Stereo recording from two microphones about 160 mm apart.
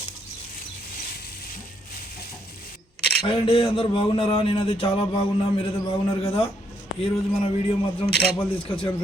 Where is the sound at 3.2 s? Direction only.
35° left (ahead or behind).